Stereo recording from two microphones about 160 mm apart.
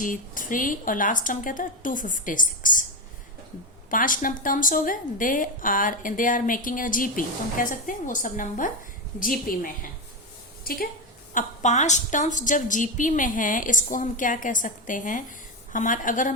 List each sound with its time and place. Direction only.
0.0 s a woman's voice: 55° left (ahead or behind)
3.8 s a woman's voice: 55° left (ahead or behind)
11.3 s a woman's voice: 50° left (ahead or behind)